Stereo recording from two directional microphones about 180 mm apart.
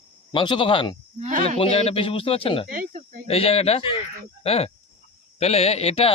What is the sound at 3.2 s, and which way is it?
Speech, 35° left (ahead or behind).